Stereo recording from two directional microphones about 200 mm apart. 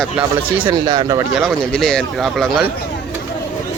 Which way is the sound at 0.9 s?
20° right (ahead or behind).